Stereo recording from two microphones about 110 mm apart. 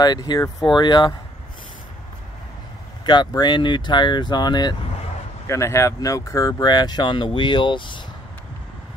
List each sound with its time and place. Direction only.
0.0 s speech: 40° left (ahead or behind)
3.1 s speech: 40° left (ahead or behind)
5.5 s speech: 25° left (ahead or behind); by 8.0 s 45° left (ahead or behind)